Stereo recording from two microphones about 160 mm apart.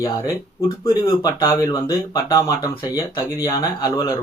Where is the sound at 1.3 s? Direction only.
20° left (ahead or behind).